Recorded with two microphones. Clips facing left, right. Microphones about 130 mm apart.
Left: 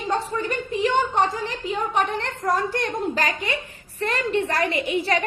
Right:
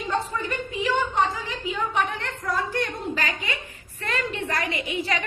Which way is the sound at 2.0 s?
35° left (ahead or behind).